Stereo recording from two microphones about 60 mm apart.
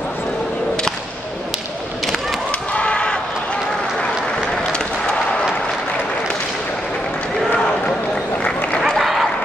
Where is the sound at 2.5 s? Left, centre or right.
Left.